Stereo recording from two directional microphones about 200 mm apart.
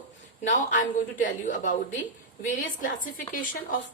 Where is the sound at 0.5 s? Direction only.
40° left (ahead or behind).